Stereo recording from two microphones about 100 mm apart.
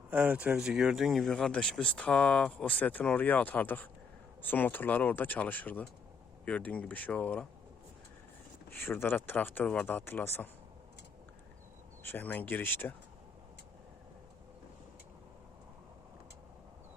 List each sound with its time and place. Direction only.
0.1 s speech: 10° right (ahead or behind); by 7.4 s 15° left (ahead or behind)
8.8 s speech: 20° left (ahead or behind)
12.0 s speech: 20° left (ahead or behind)